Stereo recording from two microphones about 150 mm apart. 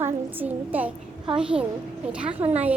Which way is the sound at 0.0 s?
10° right (ahead or behind).